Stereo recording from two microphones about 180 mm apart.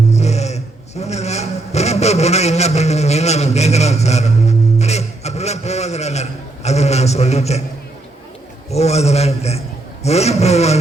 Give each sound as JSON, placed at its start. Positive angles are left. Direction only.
{"t": 0.1, "sound": "snoring", "side_deg": 40}
{"t": 8.7, "sound": "a man's voice", "side_deg": 35}